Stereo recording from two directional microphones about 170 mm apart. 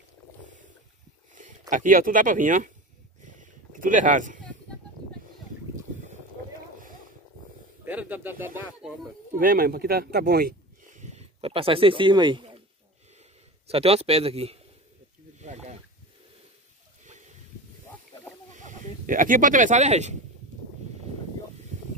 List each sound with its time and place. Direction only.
1.7 s speech: 50° right (ahead or behind)
3.3 s a sound: 50° right (ahead or behind)
7.8 s speech: 10° right (ahead or behind)
9.4 s speech: 60° right (ahead or behind); by 12.6 s 30° right (ahead or behind)
13.7 s a man's voice: 35° right (ahead or behind)
18.5 s speech: 45° right (ahead or behind)